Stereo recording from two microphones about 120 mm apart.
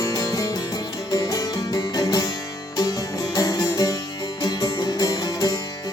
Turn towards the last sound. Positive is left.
turn(degrees=35)  # may be behind; listen again after turning